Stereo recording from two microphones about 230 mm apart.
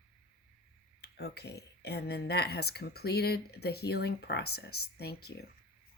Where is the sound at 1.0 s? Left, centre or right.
Left.